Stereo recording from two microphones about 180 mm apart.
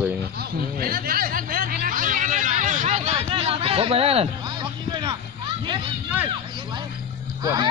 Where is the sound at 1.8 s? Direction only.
50° right (ahead or behind); by 5.2 s 25° right (ahead or behind).